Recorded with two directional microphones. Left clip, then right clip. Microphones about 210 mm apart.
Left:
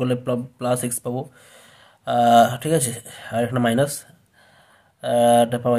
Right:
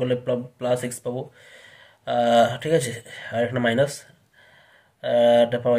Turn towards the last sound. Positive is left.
turn(degrees=30)  # may be behind; listen again after turning